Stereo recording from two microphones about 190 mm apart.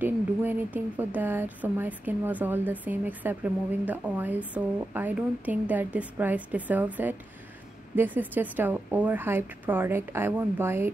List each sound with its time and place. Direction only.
0.0 s speech: 10° right (ahead or behind)